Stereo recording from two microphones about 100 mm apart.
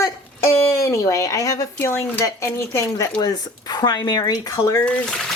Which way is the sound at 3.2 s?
45° left (ahead or behind).